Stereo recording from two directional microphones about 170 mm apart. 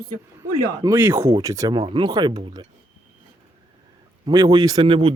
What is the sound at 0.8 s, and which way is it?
Speech, 15° right (ahead or behind).